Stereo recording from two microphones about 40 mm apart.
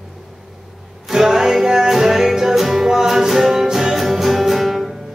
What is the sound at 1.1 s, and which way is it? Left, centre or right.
Music, centre.